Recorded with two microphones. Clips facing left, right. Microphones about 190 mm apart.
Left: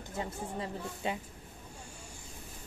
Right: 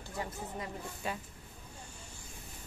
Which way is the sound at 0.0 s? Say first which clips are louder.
Left 2 dB; 25° left (ahead or behind).